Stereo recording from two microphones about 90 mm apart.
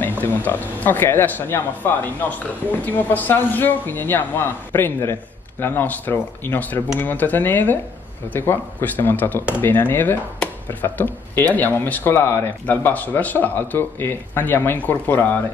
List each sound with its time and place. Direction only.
0.2 s speech: 20° left (ahead or behind)